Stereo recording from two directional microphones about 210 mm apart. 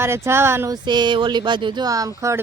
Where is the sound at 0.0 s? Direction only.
10° right (ahead or behind).